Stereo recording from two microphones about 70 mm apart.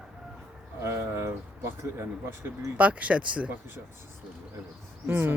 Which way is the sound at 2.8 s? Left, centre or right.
Centre.